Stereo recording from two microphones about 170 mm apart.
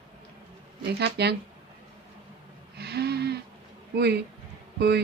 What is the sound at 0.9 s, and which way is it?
Speech, 75° right (ahead or behind).